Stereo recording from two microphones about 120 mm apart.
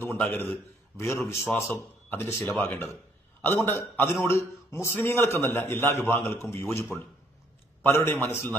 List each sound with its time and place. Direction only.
0.2 s a man's voice: 15° left (ahead or behind)